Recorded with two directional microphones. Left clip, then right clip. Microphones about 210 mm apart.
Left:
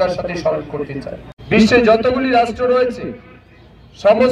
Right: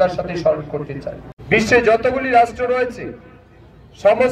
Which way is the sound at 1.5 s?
40° left (ahead or behind).